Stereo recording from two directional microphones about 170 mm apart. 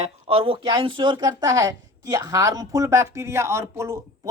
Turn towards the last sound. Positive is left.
turn(degrees=-15)  # may be behind; listen again after turning